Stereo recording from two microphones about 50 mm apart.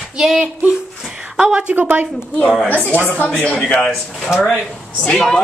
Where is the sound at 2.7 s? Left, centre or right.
Left.